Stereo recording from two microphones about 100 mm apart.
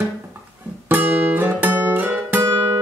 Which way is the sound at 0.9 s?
20° right (ahead or behind).